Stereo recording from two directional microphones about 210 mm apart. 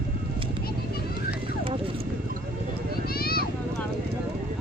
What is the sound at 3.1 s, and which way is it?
Vehicle, 45° left (ahead or behind).